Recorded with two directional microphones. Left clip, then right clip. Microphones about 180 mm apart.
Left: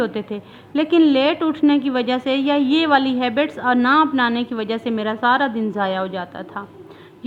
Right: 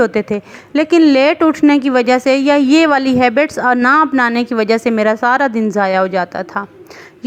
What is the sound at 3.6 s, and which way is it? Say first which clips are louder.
Speech: right 4 dB; 40° right (ahead or behind).